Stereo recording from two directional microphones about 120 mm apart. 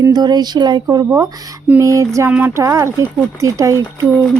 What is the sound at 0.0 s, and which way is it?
Speech, 35° right (ahead or behind).